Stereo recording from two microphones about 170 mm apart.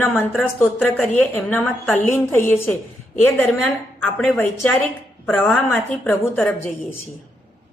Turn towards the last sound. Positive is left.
turn(degrees=10)  # may be behind; listen again after turning